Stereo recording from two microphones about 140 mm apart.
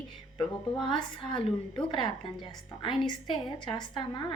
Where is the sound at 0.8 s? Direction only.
35° left (ahead or behind).